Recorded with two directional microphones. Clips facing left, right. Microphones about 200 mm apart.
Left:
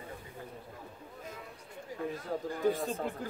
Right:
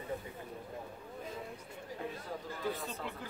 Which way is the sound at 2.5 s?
45° left (ahead or behind).